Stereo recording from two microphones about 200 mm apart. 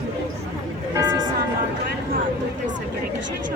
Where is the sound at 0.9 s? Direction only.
20° right (ahead or behind).